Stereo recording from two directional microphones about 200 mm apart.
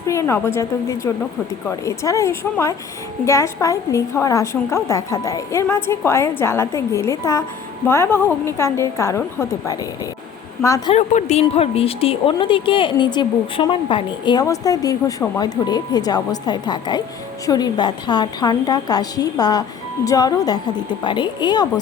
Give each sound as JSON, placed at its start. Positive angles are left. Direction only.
{"t": 0.1, "sound": "a woman's voice", "side_deg": 15}
{"t": 10.9, "sound": "a woman's voice", "side_deg": 35}